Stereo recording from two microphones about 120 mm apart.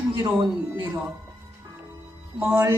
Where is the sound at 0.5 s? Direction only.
20° right (ahead or behind).